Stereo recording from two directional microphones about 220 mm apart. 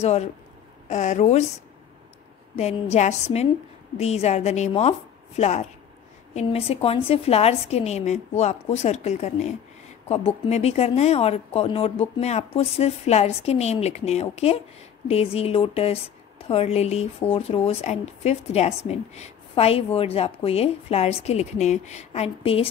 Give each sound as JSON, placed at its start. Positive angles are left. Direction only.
{"t": 0.0, "sound": "speech", "side_deg": 30}
{"t": 2.5, "sound": "speech", "side_deg": 30}